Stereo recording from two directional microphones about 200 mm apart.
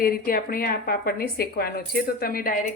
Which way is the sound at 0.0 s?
45° left (ahead or behind).